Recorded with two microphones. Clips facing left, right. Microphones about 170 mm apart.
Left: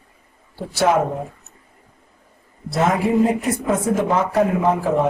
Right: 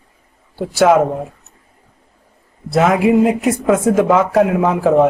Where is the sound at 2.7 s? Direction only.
90° right.